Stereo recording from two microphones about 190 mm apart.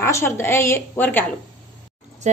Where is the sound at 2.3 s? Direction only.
40° right (ahead or behind).